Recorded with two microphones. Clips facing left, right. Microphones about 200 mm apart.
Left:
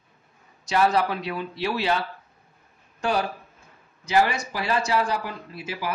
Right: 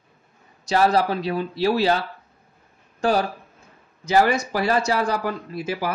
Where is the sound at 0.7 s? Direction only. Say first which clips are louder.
Right 3 dB; 35° right (ahead or behind).